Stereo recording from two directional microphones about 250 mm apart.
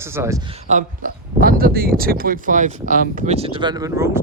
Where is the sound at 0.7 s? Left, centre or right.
Right.